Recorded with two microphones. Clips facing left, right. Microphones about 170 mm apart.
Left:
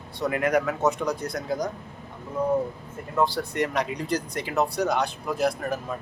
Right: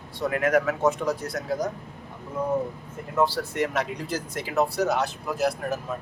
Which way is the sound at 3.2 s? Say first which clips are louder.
Even; 5° right (ahead or behind).